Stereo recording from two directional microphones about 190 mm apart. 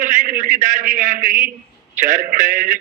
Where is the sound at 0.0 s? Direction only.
45° right (ahead or behind).